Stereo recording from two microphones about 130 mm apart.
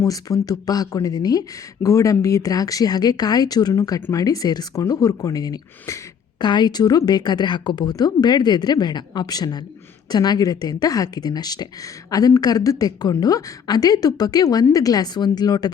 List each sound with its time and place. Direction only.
0.0 s speech: 30° left (ahead or behind)